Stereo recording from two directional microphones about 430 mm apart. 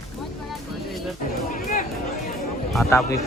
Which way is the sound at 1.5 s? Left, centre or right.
Centre.